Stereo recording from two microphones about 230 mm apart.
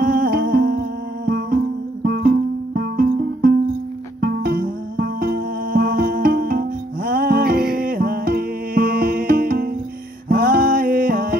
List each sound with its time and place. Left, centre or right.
0.0 s music: right